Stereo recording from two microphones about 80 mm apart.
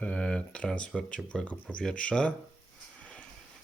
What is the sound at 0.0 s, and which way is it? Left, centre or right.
Speech, centre.